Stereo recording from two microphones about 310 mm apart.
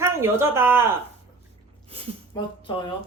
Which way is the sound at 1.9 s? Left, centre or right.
Centre.